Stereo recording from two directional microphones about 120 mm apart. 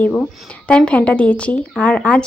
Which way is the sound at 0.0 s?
10° left (ahead or behind).